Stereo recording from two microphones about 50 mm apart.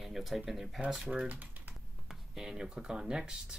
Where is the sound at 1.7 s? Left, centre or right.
Centre.